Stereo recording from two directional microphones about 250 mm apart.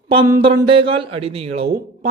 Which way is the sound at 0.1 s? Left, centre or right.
Centre.